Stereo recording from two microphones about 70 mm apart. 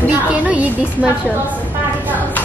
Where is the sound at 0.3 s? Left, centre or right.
Right.